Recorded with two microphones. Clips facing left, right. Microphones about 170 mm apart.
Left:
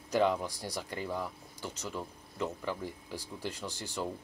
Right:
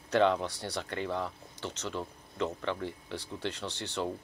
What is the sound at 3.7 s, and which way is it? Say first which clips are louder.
Speech: right 2 dB; 70° right (ahead or behind).